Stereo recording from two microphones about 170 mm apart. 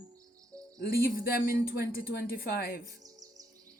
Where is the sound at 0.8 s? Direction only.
60° left (ahead or behind).